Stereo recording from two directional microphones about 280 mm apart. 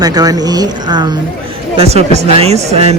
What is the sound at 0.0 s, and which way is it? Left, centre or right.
Speech, centre.